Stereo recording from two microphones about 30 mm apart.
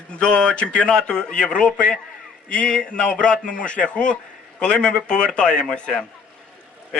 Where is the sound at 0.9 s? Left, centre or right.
Left.